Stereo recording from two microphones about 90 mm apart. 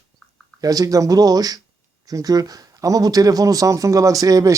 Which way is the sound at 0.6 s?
40° right (ahead or behind).